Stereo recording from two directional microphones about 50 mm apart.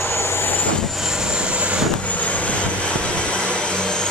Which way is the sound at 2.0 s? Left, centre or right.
Left.